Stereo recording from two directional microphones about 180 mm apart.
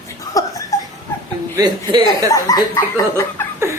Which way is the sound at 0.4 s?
20° left (ahead or behind).